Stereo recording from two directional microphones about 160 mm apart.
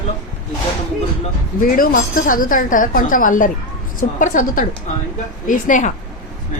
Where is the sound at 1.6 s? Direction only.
60° left (ahead or behind).